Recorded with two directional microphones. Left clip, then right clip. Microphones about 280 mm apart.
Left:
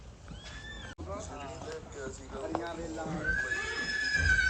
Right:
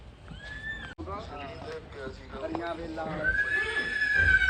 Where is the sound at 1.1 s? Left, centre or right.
Centre.